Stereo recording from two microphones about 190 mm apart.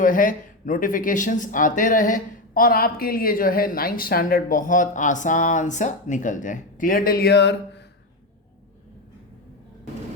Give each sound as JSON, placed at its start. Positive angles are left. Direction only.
{"t": 0.0, "sound": "speech", "side_deg": 45}